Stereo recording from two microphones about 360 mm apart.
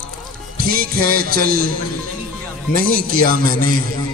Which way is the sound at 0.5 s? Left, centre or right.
Right.